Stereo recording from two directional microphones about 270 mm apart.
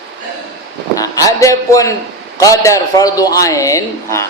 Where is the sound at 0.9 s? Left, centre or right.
Centre.